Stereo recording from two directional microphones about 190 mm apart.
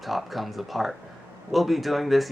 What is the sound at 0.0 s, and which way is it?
Speech, centre (ahead or behind).